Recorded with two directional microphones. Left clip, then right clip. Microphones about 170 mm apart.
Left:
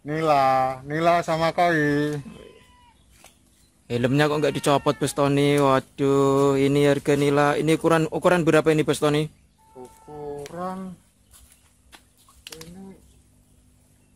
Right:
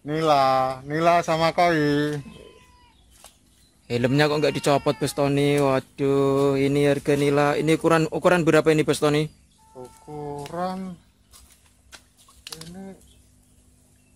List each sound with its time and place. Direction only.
0.0 s speech: centre (ahead or behind)
3.8 s speech: centre (ahead or behind)
10.5 s a sound: 55° right (ahead or behind)